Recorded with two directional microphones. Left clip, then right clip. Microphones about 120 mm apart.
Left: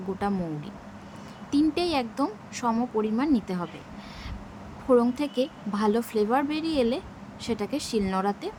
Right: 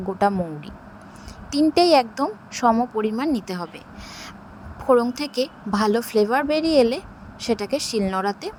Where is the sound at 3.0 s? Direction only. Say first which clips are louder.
Right 2 dB; 60° right (ahead or behind).